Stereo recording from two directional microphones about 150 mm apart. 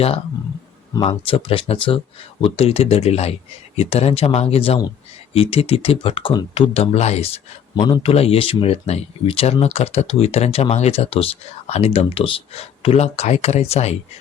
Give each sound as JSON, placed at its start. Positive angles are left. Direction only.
{"t": 0.9, "sound": "speech", "side_deg": 35}
{"t": 7.8, "sound": "speech", "side_deg": 35}